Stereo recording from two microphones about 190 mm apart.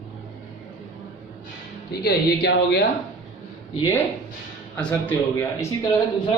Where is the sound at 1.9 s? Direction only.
60° left (ahead or behind).